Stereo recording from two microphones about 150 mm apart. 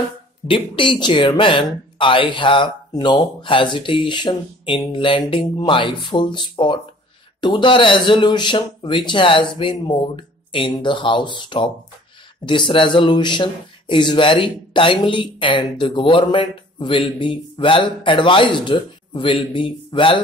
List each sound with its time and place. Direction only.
0.5 s speech: 35° left (ahead or behind)